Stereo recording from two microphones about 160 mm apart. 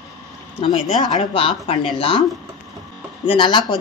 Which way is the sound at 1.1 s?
35° left (ahead or behind).